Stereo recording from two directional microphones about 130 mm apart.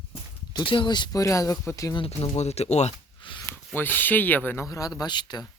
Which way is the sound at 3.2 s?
40° left (ahead or behind).